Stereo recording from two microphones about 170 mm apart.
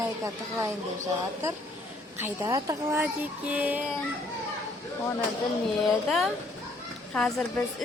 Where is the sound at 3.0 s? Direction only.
5° right (ahead or behind).